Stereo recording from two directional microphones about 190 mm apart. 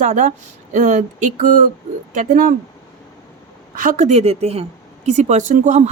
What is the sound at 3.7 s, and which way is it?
Speech, 45° right (ahead or behind).